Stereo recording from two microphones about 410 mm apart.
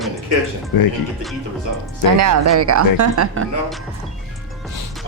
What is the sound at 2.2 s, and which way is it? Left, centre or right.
Speech, right.